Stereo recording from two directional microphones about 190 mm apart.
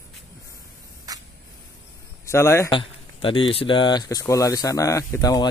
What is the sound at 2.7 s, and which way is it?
Speech, 25° left (ahead or behind).